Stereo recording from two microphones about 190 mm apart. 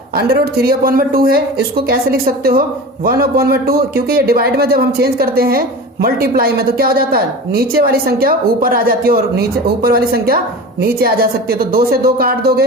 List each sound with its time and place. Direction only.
0.2 s speech: 55° right (ahead or behind)